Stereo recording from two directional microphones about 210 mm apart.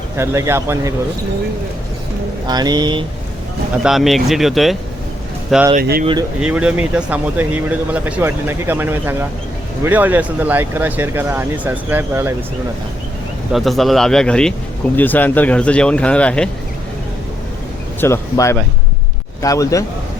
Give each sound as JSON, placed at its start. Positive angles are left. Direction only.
{"t": 0.2, "sound": "speech", "side_deg": -10}
{"t": 2.5, "sound": "speech", "side_deg": -20}
{"t": 3.8, "sound": "speech", "side_deg": 0}
{"t": 5.7, "sound": "speech", "side_deg": -45}
{"t": 6.4, "sound": "speech", "side_deg": -5}
{"t": 13.5, "sound": "speech", "side_deg": 0}
{"t": 18.0, "sound": "speech", "side_deg": 15}